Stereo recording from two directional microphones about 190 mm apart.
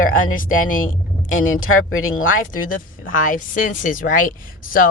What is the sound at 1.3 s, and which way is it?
Speech, 90° left.